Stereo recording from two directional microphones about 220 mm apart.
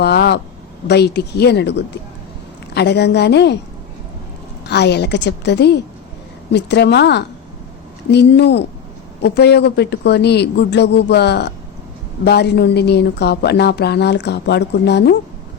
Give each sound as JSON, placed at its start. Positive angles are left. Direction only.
{"t": 0.0, "sound": "a sound", "side_deg": 50}
{"t": 0.9, "sound": "a woman's voice", "side_deg": 50}
{"t": 4.7, "sound": "a woman's voice", "side_deg": 50}